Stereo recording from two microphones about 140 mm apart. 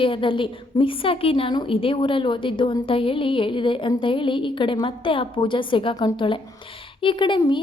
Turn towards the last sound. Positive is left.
turn(degrees=35)  # may be behind; listen again after turning